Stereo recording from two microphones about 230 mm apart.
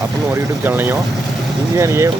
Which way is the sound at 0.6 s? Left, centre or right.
Centre.